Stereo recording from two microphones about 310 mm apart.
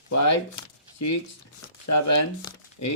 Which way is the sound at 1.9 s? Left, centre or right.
Left.